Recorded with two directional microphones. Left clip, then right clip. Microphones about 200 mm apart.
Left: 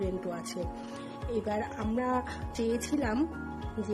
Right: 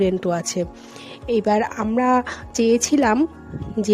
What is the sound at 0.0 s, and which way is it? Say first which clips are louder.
A woman's voice: right 14 dB; 45° right (ahead or behind).